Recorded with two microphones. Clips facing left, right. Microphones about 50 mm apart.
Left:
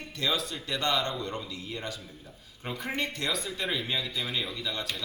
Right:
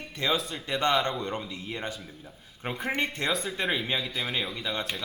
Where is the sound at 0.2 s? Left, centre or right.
Right.